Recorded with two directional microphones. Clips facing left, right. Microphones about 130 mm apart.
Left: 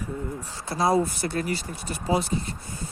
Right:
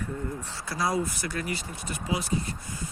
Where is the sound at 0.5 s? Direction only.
25° left (ahead or behind).